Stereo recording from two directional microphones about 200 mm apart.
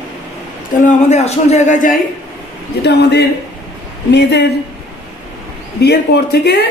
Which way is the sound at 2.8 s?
55° left (ahead or behind).